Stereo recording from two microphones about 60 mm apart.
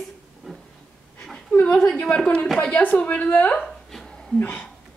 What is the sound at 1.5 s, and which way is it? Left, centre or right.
A woman's voice, centre.